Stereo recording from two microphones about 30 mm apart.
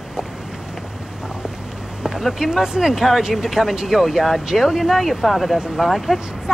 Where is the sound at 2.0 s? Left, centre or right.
Centre.